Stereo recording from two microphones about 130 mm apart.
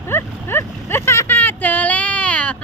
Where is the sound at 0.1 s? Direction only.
20° left (ahead or behind).